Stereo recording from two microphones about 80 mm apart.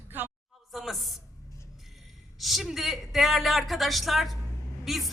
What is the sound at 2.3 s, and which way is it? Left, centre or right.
Speech, centre.